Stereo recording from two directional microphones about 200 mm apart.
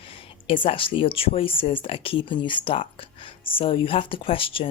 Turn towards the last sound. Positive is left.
turn(degrees=25)  # may be behind; listen again after turning